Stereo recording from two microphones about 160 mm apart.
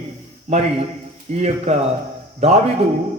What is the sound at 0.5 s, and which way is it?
A man's voice, 40° right (ahead or behind).